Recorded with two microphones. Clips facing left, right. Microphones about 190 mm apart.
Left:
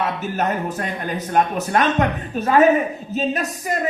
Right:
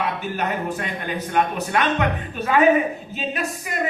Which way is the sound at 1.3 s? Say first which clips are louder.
Left 3 dB; 40° left (ahead or behind).